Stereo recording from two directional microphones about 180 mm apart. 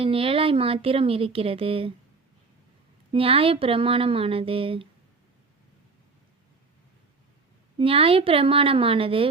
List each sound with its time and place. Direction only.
0.0 s speech: 30° right (ahead or behind)
3.1 s speech: 30° right (ahead or behind)
7.8 s speech: 30° right (ahead or behind)